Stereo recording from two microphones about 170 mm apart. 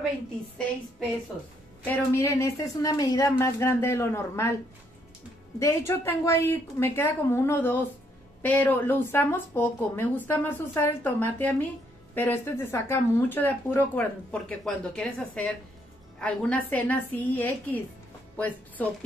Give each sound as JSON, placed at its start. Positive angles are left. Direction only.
{"t": 1.9, "sound": "speech", "side_deg": 15}
{"t": 5.6, "sound": "a woman's voice", "side_deg": 15}